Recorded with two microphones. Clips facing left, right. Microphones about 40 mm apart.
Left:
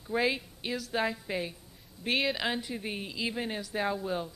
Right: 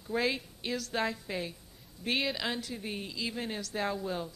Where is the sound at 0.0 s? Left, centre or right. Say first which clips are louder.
Left 2 dB; centre.